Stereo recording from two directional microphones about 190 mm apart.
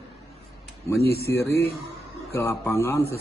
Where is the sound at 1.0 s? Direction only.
55° left (ahead or behind).